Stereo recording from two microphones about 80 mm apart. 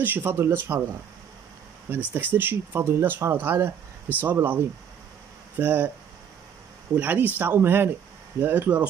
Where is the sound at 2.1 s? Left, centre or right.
Right.